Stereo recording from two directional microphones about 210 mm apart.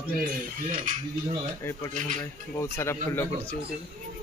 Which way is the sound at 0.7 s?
40° right (ahead or behind).